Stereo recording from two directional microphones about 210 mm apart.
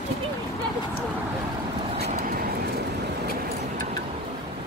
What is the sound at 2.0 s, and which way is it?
Vehicle, 45° right (ahead or behind).